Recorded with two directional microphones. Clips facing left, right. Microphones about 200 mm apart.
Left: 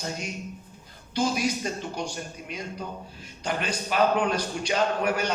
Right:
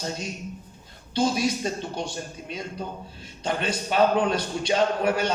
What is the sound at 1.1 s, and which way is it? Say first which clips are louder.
Speech: right 2 dB; 30° right (ahead or behind).